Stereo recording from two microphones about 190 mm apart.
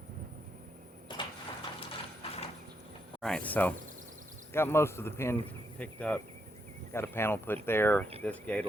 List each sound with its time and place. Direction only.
1.1 s a sound: 25° left (ahead or behind)
1.9 s mechanisms: 30° left (ahead or behind)
3.2 s speech: 5° left (ahead or behind)